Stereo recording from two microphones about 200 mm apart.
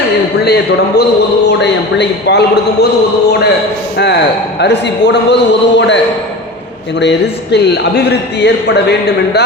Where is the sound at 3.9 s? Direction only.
60° left (ahead or behind).